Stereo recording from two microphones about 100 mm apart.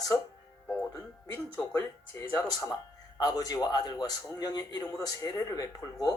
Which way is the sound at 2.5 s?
35° left (ahead or behind).